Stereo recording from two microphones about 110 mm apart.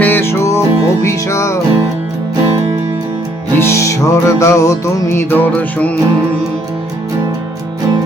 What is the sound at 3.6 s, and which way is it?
Music, 25° left (ahead or behind).